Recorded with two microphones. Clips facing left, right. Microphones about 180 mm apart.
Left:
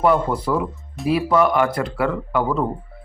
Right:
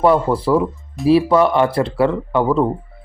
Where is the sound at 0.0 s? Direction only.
30° right (ahead or behind).